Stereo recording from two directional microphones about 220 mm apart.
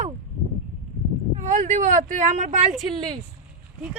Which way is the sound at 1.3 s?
35° right (ahead or behind).